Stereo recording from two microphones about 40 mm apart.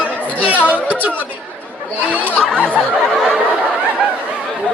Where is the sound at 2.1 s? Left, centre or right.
Right.